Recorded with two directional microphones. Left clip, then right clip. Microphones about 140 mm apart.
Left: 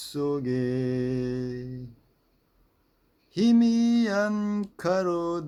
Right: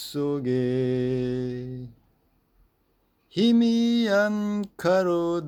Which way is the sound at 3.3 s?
20° right (ahead or behind).